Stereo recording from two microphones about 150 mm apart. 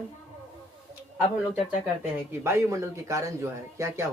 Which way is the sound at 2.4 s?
20° right (ahead or behind).